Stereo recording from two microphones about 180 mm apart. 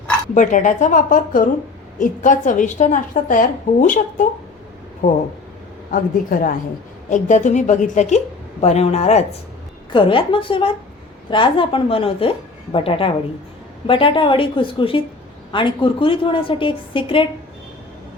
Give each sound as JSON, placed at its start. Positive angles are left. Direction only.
{"t": 0.3, "sound": "a woman's voice", "side_deg": 45}
{"t": 5.9, "sound": "a woman's voice", "side_deg": 50}